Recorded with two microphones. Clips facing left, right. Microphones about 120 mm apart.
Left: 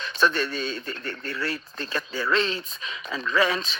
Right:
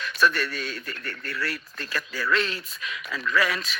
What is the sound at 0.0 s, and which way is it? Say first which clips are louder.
A man's voice: even; 25° left (ahead or behind).